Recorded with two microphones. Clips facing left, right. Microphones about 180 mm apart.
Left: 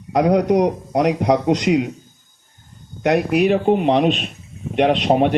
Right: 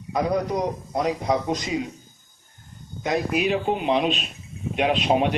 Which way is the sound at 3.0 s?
70° left (ahead or behind).